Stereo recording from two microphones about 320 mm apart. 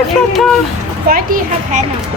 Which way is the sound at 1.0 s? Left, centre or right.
Right.